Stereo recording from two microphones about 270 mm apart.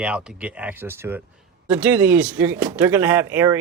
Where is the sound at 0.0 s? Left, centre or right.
Centre.